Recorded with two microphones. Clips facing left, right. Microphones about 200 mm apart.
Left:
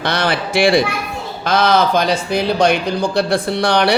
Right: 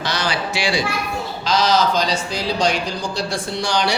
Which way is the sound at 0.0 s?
60° left (ahead or behind).